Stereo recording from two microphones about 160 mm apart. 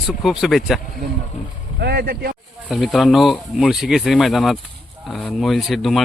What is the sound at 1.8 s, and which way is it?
Speech, 85° right.